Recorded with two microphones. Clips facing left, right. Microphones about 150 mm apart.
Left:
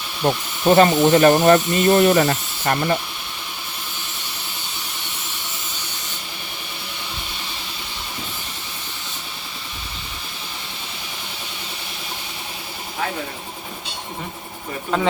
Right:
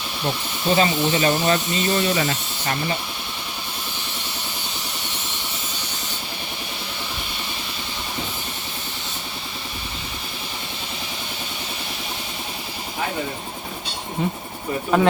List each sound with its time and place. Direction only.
0.2 s speech: 50° left (ahead or behind)